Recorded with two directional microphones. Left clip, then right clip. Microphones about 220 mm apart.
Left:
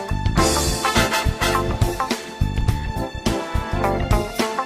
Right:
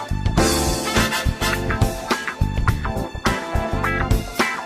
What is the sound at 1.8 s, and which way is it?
Music, centre (ahead or behind).